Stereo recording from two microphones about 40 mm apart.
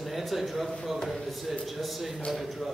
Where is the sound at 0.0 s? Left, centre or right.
Centre.